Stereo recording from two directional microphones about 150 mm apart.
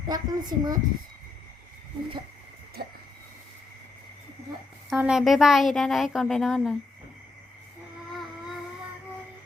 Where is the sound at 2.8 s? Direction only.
90° right.